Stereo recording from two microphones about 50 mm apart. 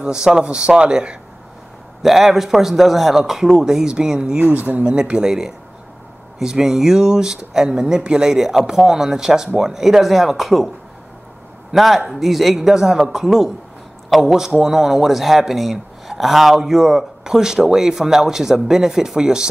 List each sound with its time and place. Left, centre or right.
0.0 s speech: centre
2.0 s speech: centre
4.6 s speech: right
4.8 s speech: right; by 10.7 s centre
11.7 s speech: centre